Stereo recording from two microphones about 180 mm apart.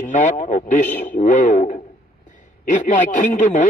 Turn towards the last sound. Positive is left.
turn(degrees=45)  # may be behind; listen again after turning